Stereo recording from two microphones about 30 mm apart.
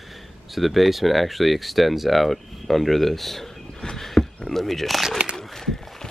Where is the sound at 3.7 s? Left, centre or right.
Centre.